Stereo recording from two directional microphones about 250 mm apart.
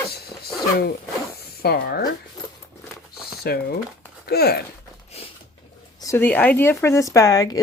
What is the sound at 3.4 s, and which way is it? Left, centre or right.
Speech, left.